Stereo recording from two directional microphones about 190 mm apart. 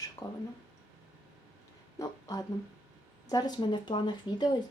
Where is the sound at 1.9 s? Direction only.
20° left (ahead or behind).